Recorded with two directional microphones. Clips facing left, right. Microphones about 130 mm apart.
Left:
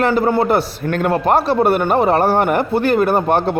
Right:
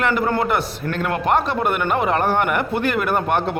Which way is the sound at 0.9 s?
45° left (ahead or behind).